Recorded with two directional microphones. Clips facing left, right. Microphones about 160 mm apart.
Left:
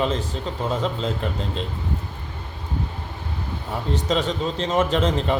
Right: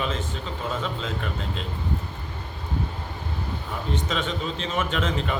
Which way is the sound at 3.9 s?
35° left (ahead or behind).